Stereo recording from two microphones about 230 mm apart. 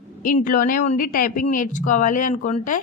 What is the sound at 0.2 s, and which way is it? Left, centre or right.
Speech, left.